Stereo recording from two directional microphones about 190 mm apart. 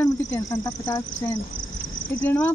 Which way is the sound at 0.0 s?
15° left (ahead or behind).